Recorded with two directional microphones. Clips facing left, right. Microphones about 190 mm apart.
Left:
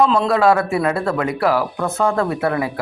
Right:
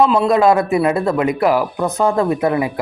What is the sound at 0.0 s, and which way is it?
Speech, 10° right (ahead or behind).